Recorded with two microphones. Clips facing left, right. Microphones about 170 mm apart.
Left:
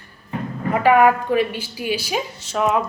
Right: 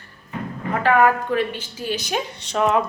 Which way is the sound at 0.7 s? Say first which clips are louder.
Left 3 dB; 10° left (ahead or behind).